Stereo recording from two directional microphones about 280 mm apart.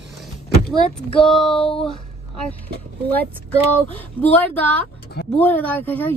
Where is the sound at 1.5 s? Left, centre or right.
Centre.